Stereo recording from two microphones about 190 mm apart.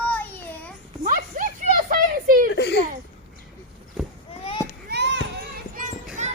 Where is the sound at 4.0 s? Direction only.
5° right (ahead or behind).